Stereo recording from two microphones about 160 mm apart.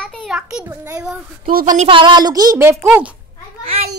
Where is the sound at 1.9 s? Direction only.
30° right (ahead or behind); by 3.2 s 10° right (ahead or behind).